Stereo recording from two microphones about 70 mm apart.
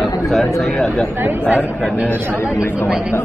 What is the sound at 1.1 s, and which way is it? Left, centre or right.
Speech, right.